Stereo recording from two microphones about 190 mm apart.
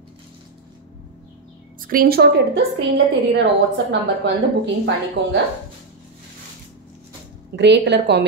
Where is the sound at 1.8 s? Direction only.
50° right (ahead or behind); by 4.3 s 65° right (ahead or behind).